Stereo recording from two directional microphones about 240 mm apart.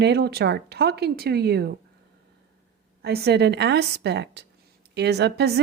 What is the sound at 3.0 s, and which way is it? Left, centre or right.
Speech, right.